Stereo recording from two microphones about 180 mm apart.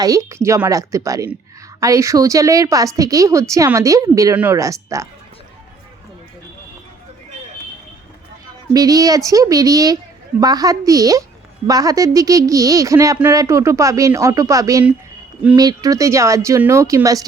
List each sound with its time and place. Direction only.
0.0 s speech: 20° right (ahead or behind)
8.7 s speech: 20° right (ahead or behind)